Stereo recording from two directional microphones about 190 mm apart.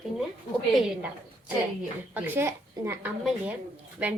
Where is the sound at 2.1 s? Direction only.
10° right (ahead or behind).